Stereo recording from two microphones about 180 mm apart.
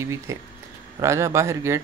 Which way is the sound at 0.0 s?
15° right (ahead or behind).